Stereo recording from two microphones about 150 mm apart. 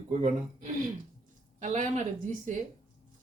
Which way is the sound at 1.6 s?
55° right (ahead or behind).